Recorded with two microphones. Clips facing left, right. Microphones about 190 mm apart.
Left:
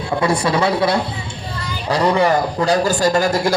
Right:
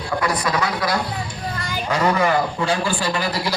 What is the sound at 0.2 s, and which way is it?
Speech, 30° left (ahead or behind).